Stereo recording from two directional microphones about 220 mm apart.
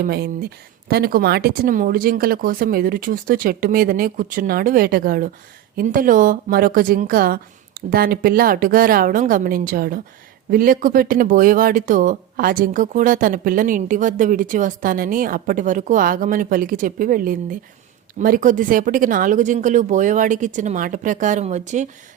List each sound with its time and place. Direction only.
0.0 s speech: 45° right (ahead or behind)